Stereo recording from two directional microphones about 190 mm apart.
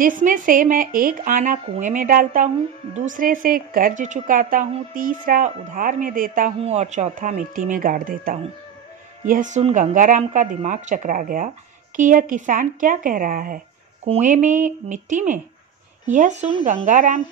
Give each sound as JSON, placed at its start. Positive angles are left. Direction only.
{"t": 0.0, "sound": "speech", "side_deg": -45}
{"t": 6.6, "sound": "speech", "side_deg": -35}